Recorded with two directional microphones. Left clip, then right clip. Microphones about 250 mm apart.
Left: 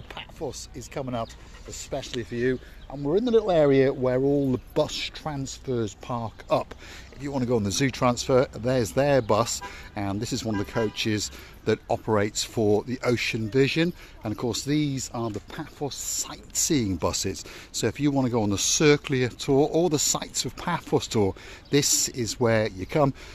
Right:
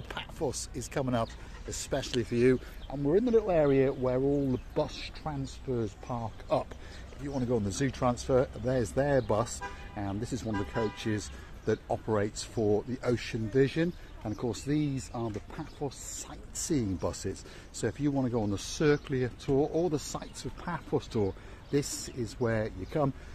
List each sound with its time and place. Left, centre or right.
0.1 s speech: centre
3.0 s speech: left
3.4 s speech: left